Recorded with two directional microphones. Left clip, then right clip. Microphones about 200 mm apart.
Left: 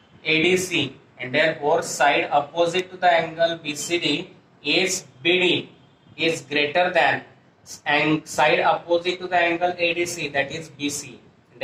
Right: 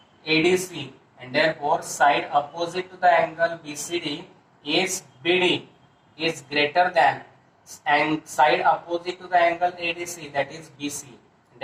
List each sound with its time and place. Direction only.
0.3 s speech: 35° left (ahead or behind)